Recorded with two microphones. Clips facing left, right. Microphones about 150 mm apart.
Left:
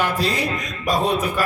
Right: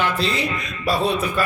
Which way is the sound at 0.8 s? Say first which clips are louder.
Even; 15° left (ahead or behind).